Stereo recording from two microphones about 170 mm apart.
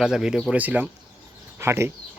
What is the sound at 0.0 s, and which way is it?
Speech, 5° right (ahead or behind).